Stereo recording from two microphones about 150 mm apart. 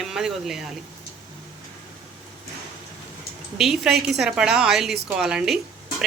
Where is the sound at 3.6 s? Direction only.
Centre (ahead or behind).